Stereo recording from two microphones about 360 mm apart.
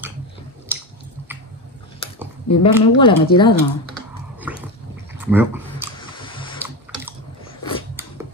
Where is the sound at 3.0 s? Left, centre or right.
Centre.